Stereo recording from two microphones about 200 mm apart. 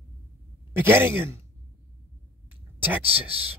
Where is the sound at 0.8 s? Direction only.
10° right (ahead or behind).